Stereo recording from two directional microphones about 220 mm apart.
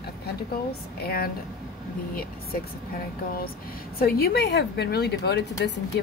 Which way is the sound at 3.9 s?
45° left (ahead or behind).